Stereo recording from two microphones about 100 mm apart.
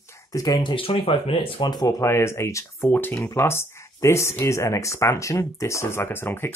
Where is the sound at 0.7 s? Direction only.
65° left (ahead or behind).